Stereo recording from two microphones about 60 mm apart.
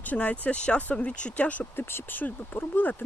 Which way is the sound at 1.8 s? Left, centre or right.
Left.